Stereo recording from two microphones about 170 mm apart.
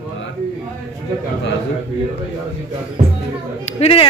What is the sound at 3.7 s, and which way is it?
Speech, 35° left (ahead or behind).